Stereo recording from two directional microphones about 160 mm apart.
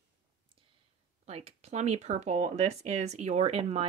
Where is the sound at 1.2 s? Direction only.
40° right (ahead or behind).